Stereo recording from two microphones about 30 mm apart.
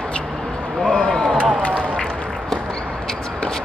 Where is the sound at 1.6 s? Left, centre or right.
Left.